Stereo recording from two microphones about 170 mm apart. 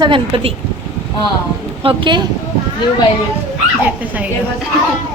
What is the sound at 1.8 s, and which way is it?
Speech, 30° right (ahead or behind).